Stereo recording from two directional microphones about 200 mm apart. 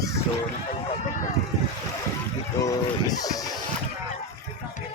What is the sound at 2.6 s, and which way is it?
Speech, 15° left (ahead or behind).